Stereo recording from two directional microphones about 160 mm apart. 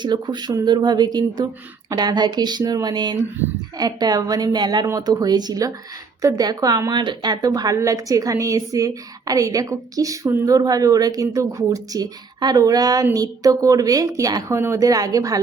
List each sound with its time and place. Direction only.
0.0 s a woman's voice: 25° right (ahead or behind)